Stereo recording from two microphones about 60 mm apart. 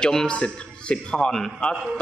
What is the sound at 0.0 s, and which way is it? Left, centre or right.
A man's voice, centre.